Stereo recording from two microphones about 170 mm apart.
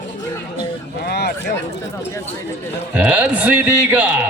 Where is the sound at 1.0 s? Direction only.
75° left (ahead or behind).